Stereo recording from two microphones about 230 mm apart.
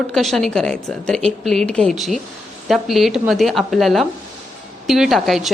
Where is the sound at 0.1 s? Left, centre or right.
Centre.